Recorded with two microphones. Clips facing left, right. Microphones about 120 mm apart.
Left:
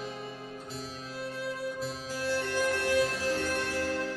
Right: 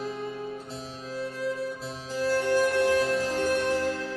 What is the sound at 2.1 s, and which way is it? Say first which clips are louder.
Music: right 8 dB; 15° right (ahead or behind).